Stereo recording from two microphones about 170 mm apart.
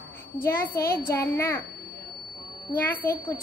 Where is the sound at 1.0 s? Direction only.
15° left (ahead or behind).